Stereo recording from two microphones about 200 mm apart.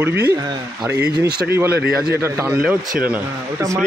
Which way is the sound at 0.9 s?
55° right (ahead or behind).